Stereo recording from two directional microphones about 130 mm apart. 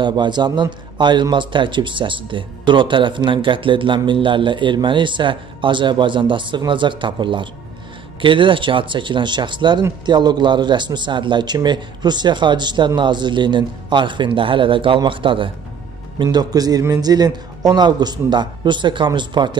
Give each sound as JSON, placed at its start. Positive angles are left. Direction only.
{"t": 0.0, "sound": "a man's voice", "side_deg": -35}